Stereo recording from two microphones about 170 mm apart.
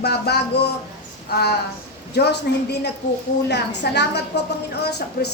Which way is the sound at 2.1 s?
75° left (ahead or behind).